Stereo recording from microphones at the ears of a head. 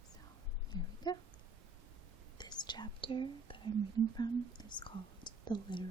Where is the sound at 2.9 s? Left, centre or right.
Right.